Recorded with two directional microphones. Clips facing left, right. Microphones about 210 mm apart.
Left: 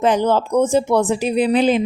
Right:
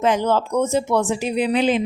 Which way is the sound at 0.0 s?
35° left (ahead or behind).